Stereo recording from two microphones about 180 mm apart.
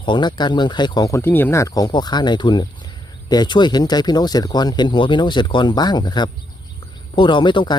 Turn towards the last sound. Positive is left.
turn(degrees=25)  # may be behind; listen again after turning